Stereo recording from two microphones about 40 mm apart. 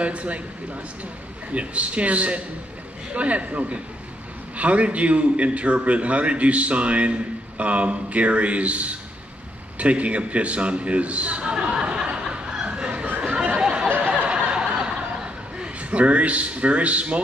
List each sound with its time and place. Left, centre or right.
0.0 s a man's voice: right
1.5 s a man's voice: right
11.5 s a sound: right
13.9 s a sound: right
14.3 s snicker: right
15.6 s a man's voice: right